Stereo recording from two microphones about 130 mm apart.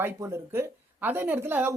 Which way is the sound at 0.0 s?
20° right (ahead or behind).